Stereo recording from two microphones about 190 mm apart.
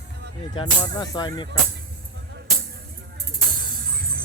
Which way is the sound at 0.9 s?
20° left (ahead or behind).